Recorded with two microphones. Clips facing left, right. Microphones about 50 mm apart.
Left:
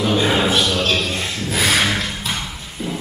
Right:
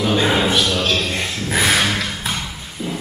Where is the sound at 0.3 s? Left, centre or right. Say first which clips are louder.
Even; centre.